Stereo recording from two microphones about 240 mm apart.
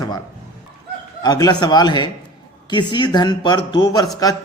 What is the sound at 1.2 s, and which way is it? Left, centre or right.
Speech, centre.